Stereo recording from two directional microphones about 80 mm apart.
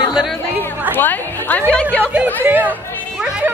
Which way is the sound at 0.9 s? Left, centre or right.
Left.